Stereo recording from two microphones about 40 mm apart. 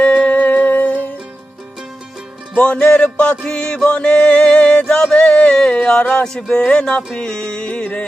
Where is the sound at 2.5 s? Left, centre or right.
Left.